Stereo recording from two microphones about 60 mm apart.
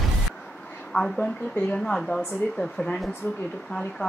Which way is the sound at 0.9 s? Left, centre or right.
Centre.